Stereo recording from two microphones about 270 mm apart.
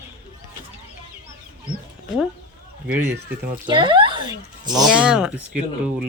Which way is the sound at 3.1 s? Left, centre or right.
Centre.